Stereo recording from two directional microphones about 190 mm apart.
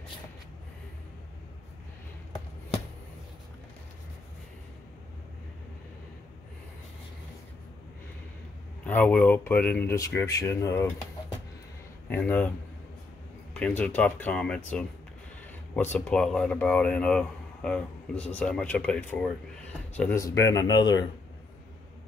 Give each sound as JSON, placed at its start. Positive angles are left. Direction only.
{"t": 8.8, "sound": "speech", "side_deg": 10}
{"t": 12.1, "sound": "speech", "side_deg": 10}